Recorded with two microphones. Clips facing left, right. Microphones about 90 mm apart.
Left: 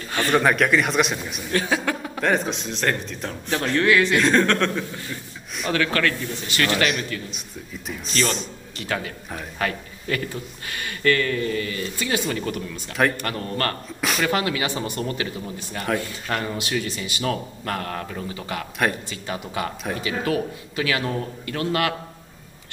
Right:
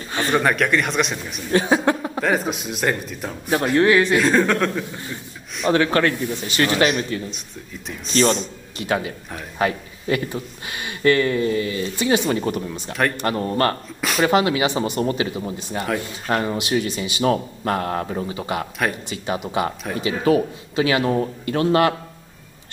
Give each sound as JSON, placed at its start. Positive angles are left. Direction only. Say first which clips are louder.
{"t": 0.3, "sound": "a man's voice", "louder": "even", "side_deg": 0}
{"t": 1.7, "sound": "a sound", "louder": "right 6 dB", "side_deg": -30}
{"t": 2.1, "sound": "speech", "louder": "right 1 dB", "side_deg": -5}
{"t": 4.2, "sound": "a man's voice", "louder": "right 1 dB", "side_deg": -5}
{"t": 5.7, "sound": "a man's voice", "louder": "right 5 dB", "side_deg": -25}
{"t": 8.7, "sound": "speech", "louder": "right 5 dB", "side_deg": -20}